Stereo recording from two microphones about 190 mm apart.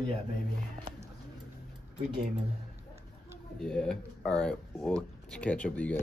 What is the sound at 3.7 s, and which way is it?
Speech, 5° left (ahead or behind).